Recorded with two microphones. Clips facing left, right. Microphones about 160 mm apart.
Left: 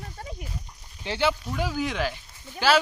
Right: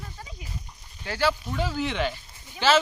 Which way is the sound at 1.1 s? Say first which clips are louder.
Even; 20° left (ahead or behind).